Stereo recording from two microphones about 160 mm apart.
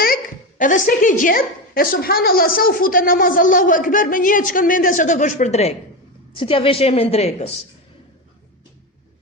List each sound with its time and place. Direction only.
0.6 s a woman's voice: 55° left (ahead or behind)
1.2 s a woman's voice: 65° left (ahead or behind); by 7.5 s 40° left (ahead or behind)